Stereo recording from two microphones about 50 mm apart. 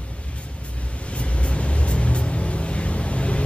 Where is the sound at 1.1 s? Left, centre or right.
Left.